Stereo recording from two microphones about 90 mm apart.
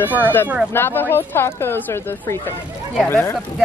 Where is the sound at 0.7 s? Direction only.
25° left (ahead or behind).